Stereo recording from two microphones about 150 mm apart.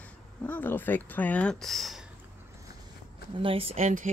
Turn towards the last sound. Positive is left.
turn(degrees=-50)  # may be behind; listen again after turning